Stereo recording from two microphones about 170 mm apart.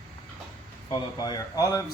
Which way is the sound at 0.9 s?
25° left (ahead or behind).